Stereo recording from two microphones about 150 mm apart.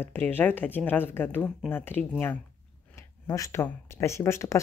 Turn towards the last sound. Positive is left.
turn(degrees=15)  # may be behind; listen again after turning